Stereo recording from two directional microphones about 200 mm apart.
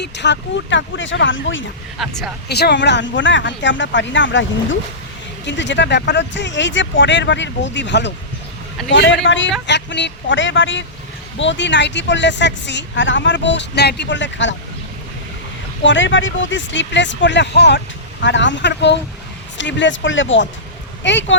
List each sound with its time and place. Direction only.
0.0 s speech: 60° left (ahead or behind)
2.0 s speech: centre (ahead or behind)
2.5 s speech: 55° left (ahead or behind)
15.8 s speech: 65° left (ahead or behind)